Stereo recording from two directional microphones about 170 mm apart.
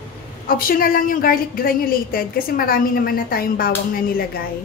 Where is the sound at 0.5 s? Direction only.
60° left (ahead or behind).